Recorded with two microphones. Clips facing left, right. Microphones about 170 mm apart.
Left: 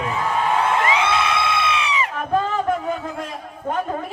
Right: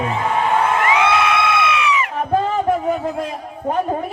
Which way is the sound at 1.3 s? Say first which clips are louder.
Right 4 dB; 30° left (ahead or behind).